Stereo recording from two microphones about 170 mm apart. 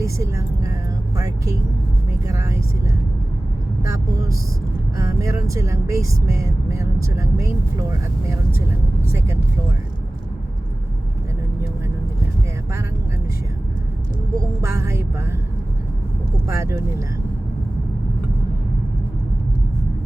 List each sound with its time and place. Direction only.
0.0 s speech: 15° right (ahead or behind)
4.9 s speech: 20° right (ahead or behind)
9.1 s speech: 15° right (ahead or behind)
14.3 s speech: 15° right (ahead or behind)
16.5 s speech: 15° right (ahead or behind)